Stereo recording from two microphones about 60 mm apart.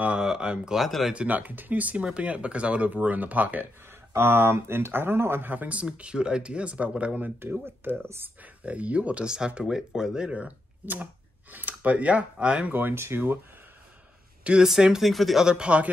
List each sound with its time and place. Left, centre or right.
0.2 s speech: centre
0.8 s speech: centre
1.1 s speech: right
4.1 s speech: right
5.5 s speech: right
7.3 s speech: right
8.6 s speech: right
12.7 s speech: right
14.4 s speech: centre
15.4 s speech: centre